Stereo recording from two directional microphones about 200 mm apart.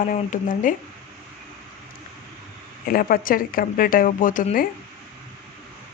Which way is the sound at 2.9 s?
45° left (ahead or behind).